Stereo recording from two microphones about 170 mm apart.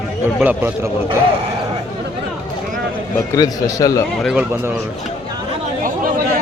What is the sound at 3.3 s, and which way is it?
Speech, 20° left (ahead or behind).